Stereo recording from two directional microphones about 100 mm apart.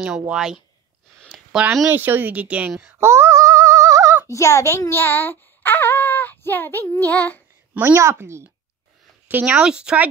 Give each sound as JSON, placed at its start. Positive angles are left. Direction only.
{"t": 0.3, "sound": "speech", "side_deg": -5}
{"t": 1.9, "sound": "speech", "side_deg": -20}
{"t": 3.0, "sound": "a sound", "side_deg": -25}
{"t": 4.3, "sound": "a child's voice", "side_deg": 30}
{"t": 7.7, "sound": "a woman's voice", "side_deg": -20}
{"t": 9.3, "sound": "speech", "side_deg": -15}